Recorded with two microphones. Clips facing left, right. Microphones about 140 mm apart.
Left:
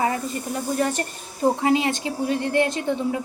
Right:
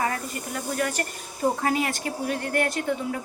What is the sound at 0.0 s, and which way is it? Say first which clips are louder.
Speech: left 4 dB; 25° left (ahead or behind).